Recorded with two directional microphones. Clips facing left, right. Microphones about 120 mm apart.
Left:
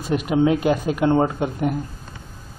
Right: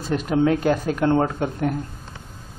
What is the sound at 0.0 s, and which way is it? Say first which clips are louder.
Speech: left 1 dB; 10° left (ahead or behind).